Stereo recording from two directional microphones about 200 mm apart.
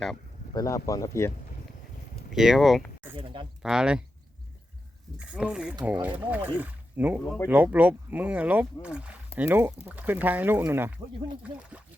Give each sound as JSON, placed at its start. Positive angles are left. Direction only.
{"t": 0.5, "sound": "speech", "side_deg": 15}
{"t": 2.3, "sound": "speech", "side_deg": 0}
{"t": 3.2, "sound": "speech", "side_deg": -25}
{"t": 3.6, "sound": "speech", "side_deg": -5}
{"t": 5.3, "sound": "speech", "side_deg": -5}